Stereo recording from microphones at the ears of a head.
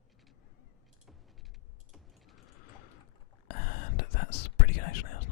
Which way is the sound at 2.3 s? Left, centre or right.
Left.